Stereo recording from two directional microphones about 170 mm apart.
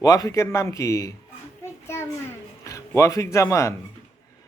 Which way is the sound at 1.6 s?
15° left (ahead or behind).